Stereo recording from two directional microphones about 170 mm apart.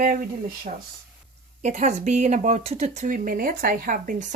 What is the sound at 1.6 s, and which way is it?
Speech, 45° right (ahead or behind).